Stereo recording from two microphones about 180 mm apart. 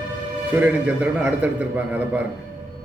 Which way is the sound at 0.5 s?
10° right (ahead or behind).